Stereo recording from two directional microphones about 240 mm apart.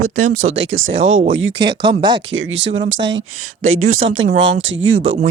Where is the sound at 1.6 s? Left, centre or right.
Centre.